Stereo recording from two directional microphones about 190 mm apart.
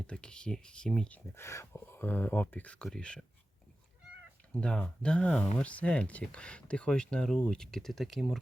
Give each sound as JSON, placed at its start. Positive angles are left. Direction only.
{"t": 0.0, "sound": "speech", "side_deg": 5}
{"t": 4.5, "sound": "speech", "side_deg": 5}